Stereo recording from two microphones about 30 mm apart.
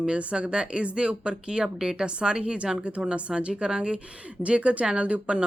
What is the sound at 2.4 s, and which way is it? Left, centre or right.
Speech, right.